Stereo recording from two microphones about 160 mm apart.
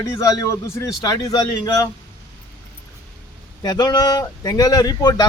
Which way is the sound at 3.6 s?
25° left (ahead or behind).